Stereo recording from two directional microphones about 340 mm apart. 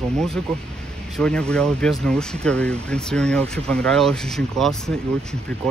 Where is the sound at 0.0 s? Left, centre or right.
Centre.